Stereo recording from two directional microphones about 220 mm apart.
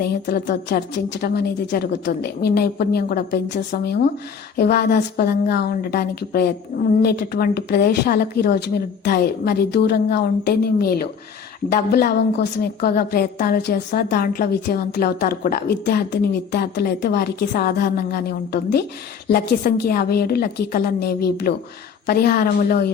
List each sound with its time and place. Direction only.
0.0 s a woman's voice: 45° left (ahead or behind)